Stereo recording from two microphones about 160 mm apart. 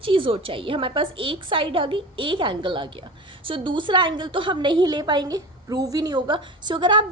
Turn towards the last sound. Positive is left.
turn(degrees=-30)  # may be behind; listen again after turning